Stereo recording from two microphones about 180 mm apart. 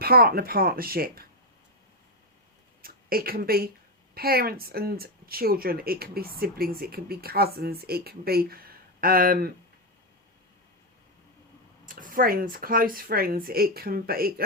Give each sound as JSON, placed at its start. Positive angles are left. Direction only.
{"t": 0.0, "sound": "speech", "side_deg": -60}
{"t": 2.8, "sound": "speech", "side_deg": -55}
{"t": 11.9, "sound": "speech", "side_deg": -50}